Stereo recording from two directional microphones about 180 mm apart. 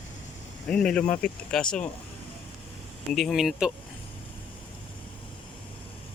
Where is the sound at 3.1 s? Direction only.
Centre (ahead or behind).